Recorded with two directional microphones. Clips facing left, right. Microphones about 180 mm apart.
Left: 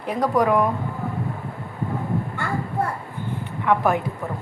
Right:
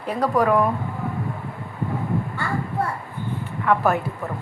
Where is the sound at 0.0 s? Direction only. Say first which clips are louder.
Even; 15° left (ahead or behind).